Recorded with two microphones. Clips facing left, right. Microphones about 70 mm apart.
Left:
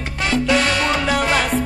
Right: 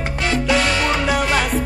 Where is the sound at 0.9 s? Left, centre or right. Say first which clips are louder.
Even; centre.